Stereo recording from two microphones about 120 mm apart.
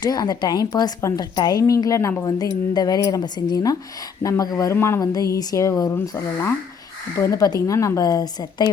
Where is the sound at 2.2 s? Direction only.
35° left (ahead or behind).